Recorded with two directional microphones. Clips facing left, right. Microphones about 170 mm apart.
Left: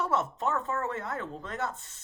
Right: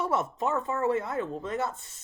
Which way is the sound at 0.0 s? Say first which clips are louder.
Right 1 dB; 10° right (ahead or behind).